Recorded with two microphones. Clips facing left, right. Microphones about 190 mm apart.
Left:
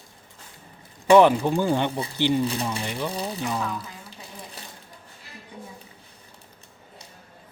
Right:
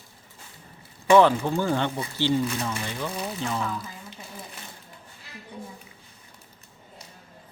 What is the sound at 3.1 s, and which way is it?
Speech, 35° left (ahead or behind).